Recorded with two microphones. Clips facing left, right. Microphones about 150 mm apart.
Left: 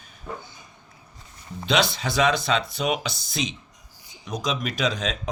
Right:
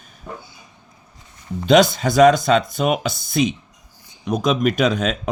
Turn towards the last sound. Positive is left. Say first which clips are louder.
# right 7 dB
turn(degrees=-55)  # may be behind; listen again after turning